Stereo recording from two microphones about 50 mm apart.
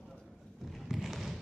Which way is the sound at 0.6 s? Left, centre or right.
Centre.